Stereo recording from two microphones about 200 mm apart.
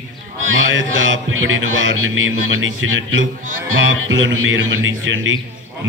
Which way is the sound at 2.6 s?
75° right (ahead or behind).